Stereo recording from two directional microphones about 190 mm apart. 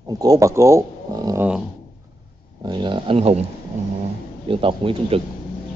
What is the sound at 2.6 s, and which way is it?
Speech, 25° right (ahead or behind).